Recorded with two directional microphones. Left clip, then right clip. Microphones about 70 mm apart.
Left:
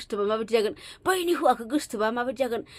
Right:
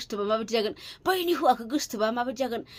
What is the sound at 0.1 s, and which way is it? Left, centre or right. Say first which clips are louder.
Speech: left 2 dB; left.